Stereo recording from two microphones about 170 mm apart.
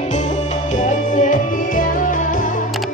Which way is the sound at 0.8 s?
45° left (ahead or behind).